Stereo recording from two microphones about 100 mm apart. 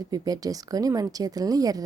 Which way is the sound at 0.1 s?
40° right (ahead or behind).